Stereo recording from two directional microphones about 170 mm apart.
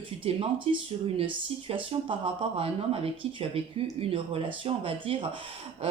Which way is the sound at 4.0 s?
35° right (ahead or behind).